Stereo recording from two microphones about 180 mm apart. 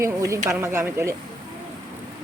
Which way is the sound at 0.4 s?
15° right (ahead or behind).